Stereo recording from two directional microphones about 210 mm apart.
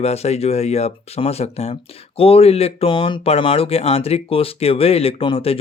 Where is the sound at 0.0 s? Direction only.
30° left (ahead or behind).